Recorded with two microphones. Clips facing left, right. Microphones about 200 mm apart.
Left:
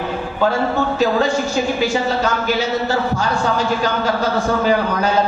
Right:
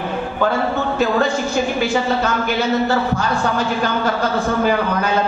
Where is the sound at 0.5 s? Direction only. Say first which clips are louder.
Left 3 dB; 55° right (ahead or behind).